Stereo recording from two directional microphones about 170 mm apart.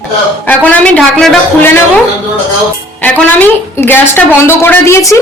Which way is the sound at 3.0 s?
5° left (ahead or behind).